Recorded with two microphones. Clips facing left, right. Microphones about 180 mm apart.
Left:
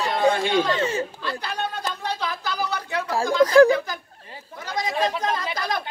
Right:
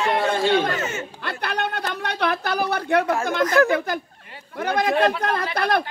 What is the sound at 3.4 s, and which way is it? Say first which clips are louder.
Speech: left 5 dB; 30° left (ahead or behind).